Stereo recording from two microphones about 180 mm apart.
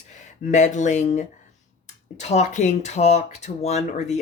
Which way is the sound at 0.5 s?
40° left (ahead or behind).